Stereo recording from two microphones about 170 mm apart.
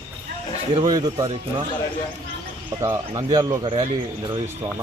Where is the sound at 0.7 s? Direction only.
25° right (ahead or behind).